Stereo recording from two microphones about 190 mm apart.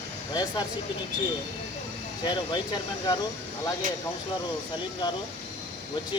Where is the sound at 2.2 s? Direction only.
25° left (ahead or behind).